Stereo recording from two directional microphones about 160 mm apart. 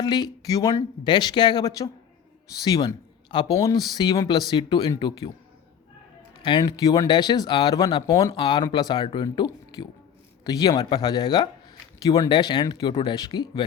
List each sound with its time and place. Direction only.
0.0 s speech: 25° left (ahead or behind)
6.4 s speech: 25° left (ahead or behind)